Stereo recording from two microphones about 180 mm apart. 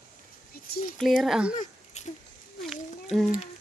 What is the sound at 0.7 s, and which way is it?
Speech, 50° left (ahead or behind).